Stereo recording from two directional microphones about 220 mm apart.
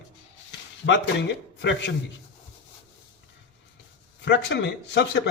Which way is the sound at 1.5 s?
55° left (ahead or behind).